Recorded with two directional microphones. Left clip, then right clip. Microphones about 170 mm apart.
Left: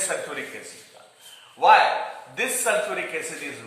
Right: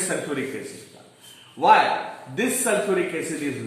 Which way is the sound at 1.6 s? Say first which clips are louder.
Left 1 dB; 25° left (ahead or behind).